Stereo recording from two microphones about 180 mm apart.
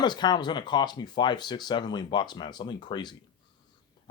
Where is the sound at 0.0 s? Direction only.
25° left (ahead or behind).